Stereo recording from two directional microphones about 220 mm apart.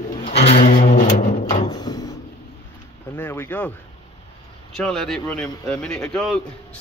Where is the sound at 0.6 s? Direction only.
40° left (ahead or behind).